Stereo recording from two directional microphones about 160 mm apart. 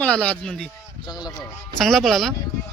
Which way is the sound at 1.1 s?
25° left (ahead or behind).